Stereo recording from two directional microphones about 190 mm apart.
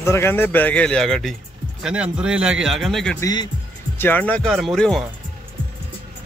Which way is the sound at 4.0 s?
10° left (ahead or behind).